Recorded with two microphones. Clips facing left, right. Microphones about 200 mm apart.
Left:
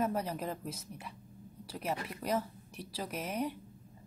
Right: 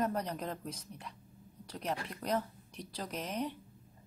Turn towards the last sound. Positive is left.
turn(degrees=10)  # may be behind; listen again after turning